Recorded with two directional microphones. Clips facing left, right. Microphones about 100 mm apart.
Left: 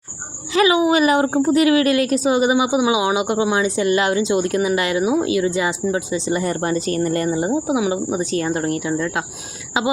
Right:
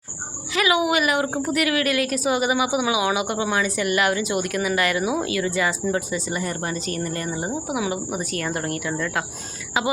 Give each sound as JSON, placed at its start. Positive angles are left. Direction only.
{"t": 0.5, "sound": "a woman's voice", "side_deg": 30}
{"t": 7.3, "sound": "a woman's voice", "side_deg": 20}